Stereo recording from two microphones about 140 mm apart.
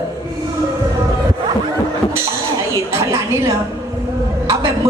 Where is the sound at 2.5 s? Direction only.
20° right (ahead or behind).